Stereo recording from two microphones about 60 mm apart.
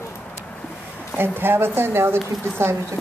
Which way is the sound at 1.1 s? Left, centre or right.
Right.